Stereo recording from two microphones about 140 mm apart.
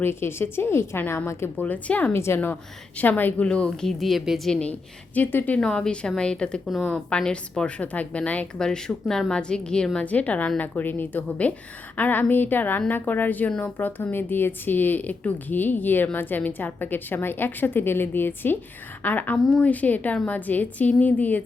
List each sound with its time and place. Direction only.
0.0 s a woman's voice: 15° left (ahead or behind)